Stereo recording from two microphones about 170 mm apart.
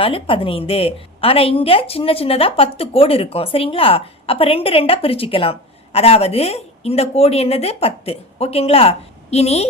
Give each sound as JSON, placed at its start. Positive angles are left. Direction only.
{"t": 0.0, "sound": "a woman's voice", "side_deg": 30}